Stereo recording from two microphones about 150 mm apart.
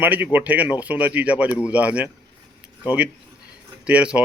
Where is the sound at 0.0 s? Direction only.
10° right (ahead or behind).